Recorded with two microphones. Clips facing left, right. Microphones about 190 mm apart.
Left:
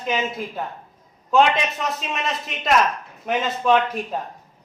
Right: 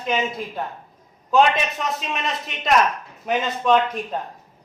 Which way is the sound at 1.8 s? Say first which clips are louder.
Even; centre (ahead or behind).